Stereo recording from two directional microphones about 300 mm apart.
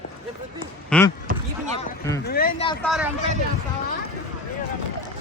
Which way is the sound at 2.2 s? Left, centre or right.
Left.